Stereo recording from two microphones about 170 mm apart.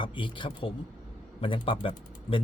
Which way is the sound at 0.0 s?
30° left (ahead or behind).